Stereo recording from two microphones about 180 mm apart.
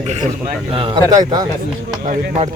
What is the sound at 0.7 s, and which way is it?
Speech, 30° right (ahead or behind).